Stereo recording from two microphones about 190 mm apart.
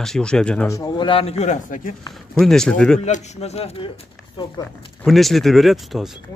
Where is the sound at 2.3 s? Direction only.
Centre (ahead or behind).